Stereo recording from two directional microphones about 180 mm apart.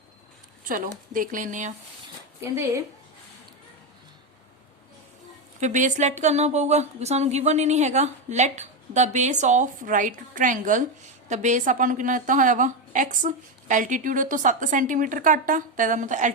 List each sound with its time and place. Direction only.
0.7 s a woman's voice: 50° right (ahead or behind)
2.4 s speech: 15° right (ahead or behind)
5.5 s a woman's voice: 40° right (ahead or behind)